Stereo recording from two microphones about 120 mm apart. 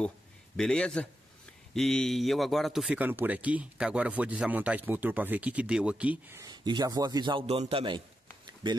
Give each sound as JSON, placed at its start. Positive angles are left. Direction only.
{"t": 0.6, "sound": "a man's voice", "side_deg": 5}
{"t": 3.0, "sound": "speech", "side_deg": -15}
{"t": 6.4, "sound": "a man's voice", "side_deg": -35}
{"t": 7.4, "sound": "a man's voice", "side_deg": -55}